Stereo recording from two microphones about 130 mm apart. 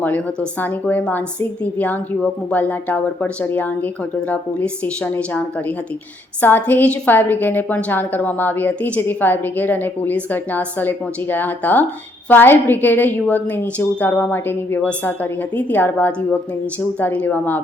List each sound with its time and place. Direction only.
0.0 s a woman's voice: 15° left (ahead or behind)